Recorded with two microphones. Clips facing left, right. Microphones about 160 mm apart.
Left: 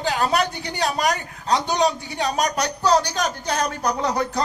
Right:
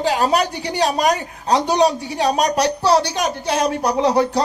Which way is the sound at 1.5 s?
35° right (ahead or behind).